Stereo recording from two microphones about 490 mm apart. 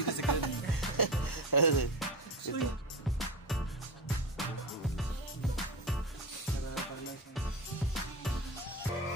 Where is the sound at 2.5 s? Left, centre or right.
Left.